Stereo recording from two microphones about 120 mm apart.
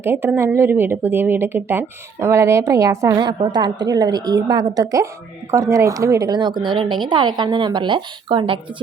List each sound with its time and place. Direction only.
0.0 s speech: 20° right (ahead or behind)
3.2 s speech: 40° right (ahead or behind)